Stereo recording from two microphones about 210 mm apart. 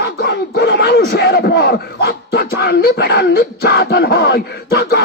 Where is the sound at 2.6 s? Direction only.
50° left (ahead or behind).